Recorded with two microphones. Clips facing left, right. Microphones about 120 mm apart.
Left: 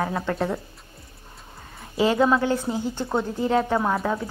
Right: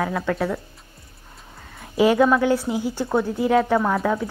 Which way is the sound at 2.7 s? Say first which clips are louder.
Right 2 dB; 10° right (ahead or behind).